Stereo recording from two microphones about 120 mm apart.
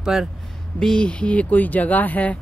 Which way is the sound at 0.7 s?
5° left (ahead or behind).